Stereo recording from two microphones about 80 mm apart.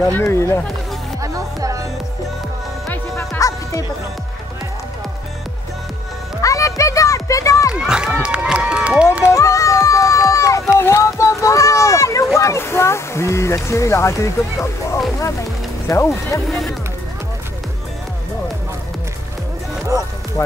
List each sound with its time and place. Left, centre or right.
0.0 s speech: left
0.3 s speech: left
1.2 s music: right
3.2 s music: left
6.4 s music: left
7.7 s run: centre
9.3 s run: left
10.8 s a sound: left
13.7 s speech: left
16.4 s speech: centre
20.4 s speech: left